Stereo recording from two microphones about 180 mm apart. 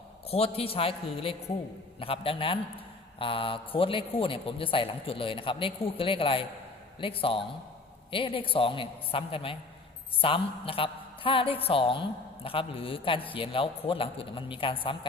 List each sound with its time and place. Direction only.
0.3 s a woman's voice: 35° left (ahead or behind)